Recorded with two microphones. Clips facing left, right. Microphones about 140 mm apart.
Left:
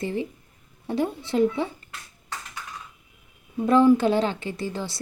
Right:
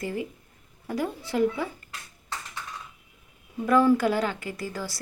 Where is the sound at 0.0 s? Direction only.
25° left (ahead or behind).